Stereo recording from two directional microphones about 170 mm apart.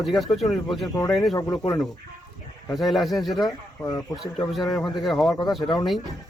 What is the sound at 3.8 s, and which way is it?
Speech, 20° left (ahead or behind).